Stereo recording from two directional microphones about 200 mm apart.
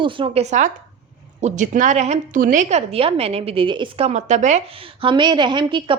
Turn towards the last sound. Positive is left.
turn(degrees=-25)  # may be behind; listen again after turning